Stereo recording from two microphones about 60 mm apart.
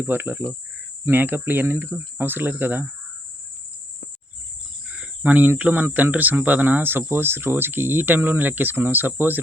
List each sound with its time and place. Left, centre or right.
0.0 s speech: right
5.2 s speech: right